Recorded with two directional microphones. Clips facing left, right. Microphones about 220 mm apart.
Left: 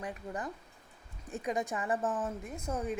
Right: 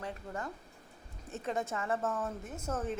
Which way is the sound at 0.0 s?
15° left (ahead or behind).